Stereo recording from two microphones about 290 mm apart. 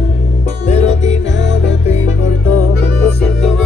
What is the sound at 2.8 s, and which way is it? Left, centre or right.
Music, centre.